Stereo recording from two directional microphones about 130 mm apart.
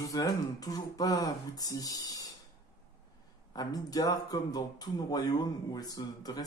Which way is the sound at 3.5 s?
30° left (ahead or behind).